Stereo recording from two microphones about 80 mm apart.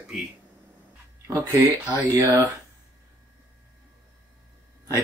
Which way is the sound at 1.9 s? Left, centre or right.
Right.